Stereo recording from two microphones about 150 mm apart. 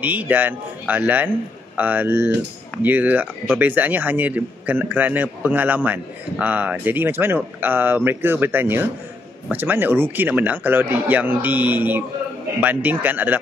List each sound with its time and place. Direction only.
0.0 s speech: 10° right (ahead or behind)